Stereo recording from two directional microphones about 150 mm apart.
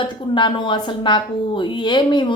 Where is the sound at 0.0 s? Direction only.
30° left (ahead or behind).